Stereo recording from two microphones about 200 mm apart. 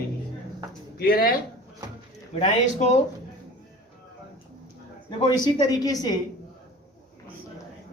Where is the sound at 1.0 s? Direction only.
50° left (ahead or behind).